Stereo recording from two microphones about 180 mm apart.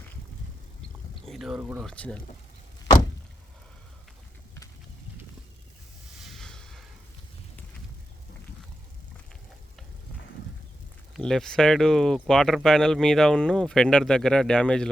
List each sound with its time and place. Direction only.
1.2 s speech: centre (ahead or behind)
1.9 s speech: 5° left (ahead or behind)
2.8 s vehicle: 20° left (ahead or behind)
6.1 s a sound: centre (ahead or behind)
11.1 s speech: centre (ahead or behind)